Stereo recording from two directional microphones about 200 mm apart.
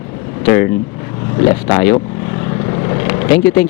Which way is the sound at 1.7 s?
15° left (ahead or behind).